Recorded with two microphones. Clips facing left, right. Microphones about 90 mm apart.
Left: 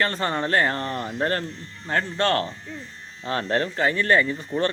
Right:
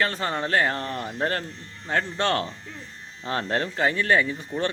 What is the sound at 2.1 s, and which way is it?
Speech, 15° right (ahead or behind).